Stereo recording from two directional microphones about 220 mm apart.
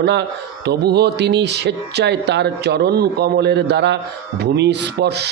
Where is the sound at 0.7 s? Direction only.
50° right (ahead or behind).